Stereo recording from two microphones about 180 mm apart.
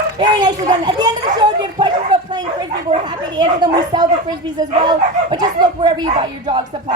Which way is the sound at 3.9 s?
25° right (ahead or behind).